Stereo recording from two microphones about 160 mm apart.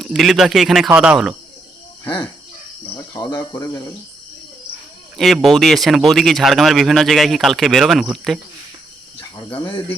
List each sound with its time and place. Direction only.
0.0 s speech: centre (ahead or behind)
3.1 s speech: 25° left (ahead or behind)
5.1 s speech: centre (ahead or behind)
9.3 s cricket: 30° left (ahead or behind)